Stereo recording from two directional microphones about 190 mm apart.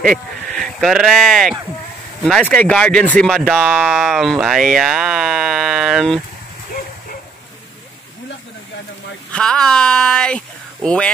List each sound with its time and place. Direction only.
0.5 s speech: 5° left (ahead or behind)
9.3 s speech: 5° left (ahead or behind)